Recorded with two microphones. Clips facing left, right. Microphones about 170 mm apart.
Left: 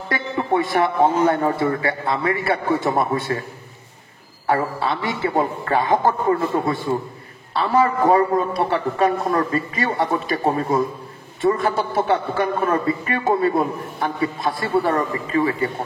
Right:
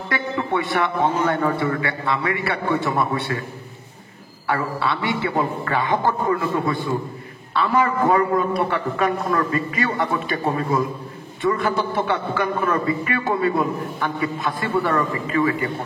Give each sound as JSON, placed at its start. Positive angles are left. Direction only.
{"t": 0.1, "sound": "a man's voice", "side_deg": 40}
{"t": 4.5, "sound": "a man's voice", "side_deg": 35}